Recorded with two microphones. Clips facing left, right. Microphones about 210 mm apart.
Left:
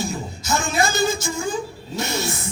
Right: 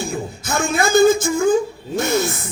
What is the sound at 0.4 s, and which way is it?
A man's voice, 55° right (ahead or behind).